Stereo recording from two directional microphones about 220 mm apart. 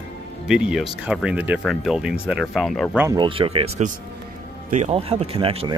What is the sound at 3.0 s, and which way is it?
Speech, 20° right (ahead or behind).